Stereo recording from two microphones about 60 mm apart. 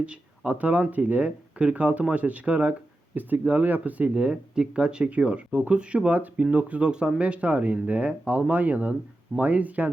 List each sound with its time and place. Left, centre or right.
0.0 s speech: right